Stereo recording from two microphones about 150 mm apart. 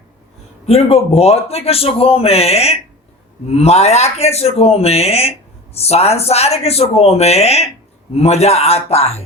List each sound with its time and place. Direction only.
0.6 s a man's voice: 45° left (ahead or behind)